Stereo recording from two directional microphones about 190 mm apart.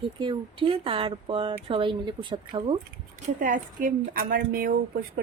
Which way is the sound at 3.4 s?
45° right (ahead or behind).